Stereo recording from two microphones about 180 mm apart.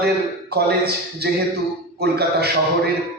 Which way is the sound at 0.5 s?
60° right (ahead or behind).